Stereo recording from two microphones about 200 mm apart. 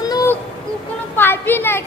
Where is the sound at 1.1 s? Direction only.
10° left (ahead or behind).